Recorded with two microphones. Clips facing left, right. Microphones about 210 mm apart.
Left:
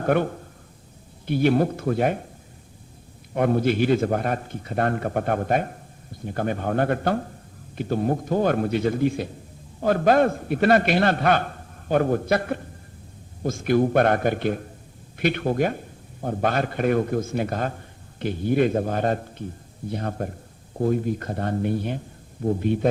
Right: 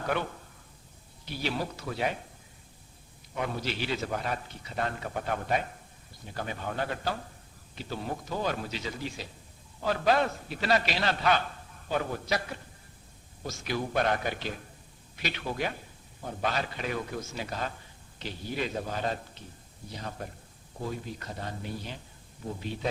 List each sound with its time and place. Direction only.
0.0 s a man's voice: 50° left (ahead or behind)
3.3 s a man's voice: 55° left (ahead or behind)